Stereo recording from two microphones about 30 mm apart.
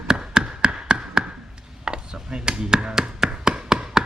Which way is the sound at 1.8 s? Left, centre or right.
Right.